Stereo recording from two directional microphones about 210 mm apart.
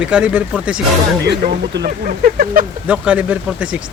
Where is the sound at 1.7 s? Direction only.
45° right (ahead or behind).